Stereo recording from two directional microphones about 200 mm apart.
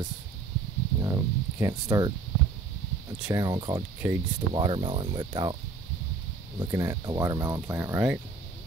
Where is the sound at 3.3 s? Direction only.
20° right (ahead or behind).